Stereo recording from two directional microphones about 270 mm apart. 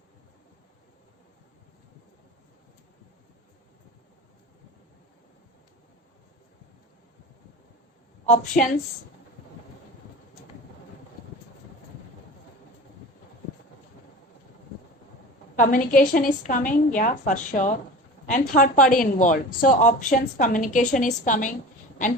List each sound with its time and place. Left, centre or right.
8.6 s speech: left
15.5 s a woman's voice: left